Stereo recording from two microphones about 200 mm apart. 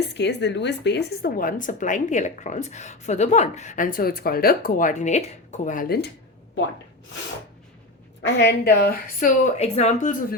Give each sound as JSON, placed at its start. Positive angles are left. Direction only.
{"t": 0.1, "sound": "speech", "side_deg": 60}
{"t": 8.2, "sound": "a woman's voice", "side_deg": 60}